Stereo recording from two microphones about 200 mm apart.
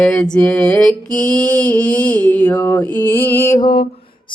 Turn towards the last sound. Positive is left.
turn(degrees=15)  # may be behind; listen again after turning